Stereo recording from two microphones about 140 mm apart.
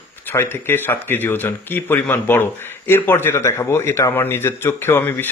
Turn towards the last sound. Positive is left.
turn(degrees=15)  # may be behind; listen again after turning